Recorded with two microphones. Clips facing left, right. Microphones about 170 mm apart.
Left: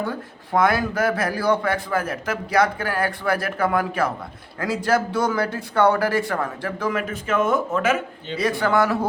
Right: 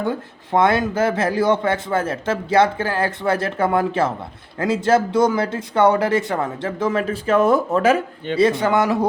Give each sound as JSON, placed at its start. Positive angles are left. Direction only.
{"t": 0.0, "sound": "speech", "side_deg": -25}
{"t": 8.4, "sound": "speech", "side_deg": -25}